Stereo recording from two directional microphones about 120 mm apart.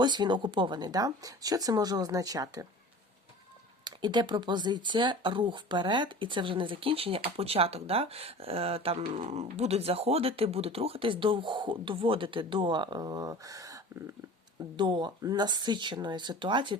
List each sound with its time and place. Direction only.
0.0 s speech: 40° right (ahead or behind)
3.8 s speech: 40° right (ahead or behind)
9.2 s speech: 65° right (ahead or behind); by 13.8 s 30° right (ahead or behind)
14.8 s speech: 40° right (ahead or behind)